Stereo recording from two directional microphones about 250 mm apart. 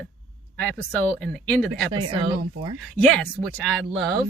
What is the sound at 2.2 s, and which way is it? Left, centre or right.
Speech, centre.